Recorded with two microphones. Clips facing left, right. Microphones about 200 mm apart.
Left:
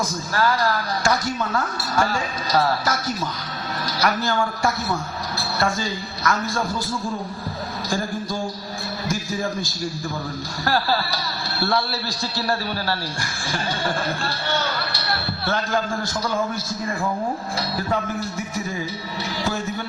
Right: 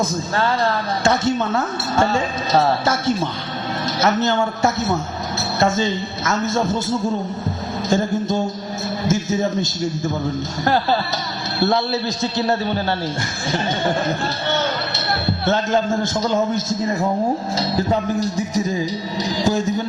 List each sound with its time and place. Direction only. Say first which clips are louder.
0.0 s a man's voice: right 2 dB; 25° right (ahead or behind)
14.5 s a man's voice: right 3 dB; 20° right (ahead or behind)